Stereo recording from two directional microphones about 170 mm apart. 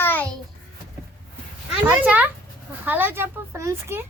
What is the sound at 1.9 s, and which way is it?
Speech, 10° right (ahead or behind).